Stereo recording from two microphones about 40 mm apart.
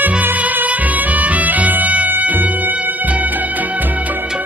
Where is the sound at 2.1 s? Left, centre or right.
Right.